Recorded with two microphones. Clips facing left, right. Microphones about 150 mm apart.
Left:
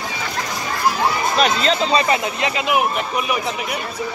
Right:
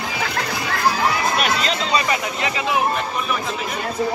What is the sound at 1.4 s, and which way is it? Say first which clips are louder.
Speech: left 4 dB; 35° left (ahead or behind).